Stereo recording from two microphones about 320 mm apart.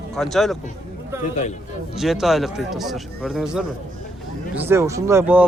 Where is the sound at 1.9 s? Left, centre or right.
Centre.